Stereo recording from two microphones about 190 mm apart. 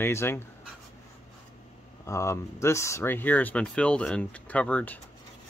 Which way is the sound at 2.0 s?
15° left (ahead or behind).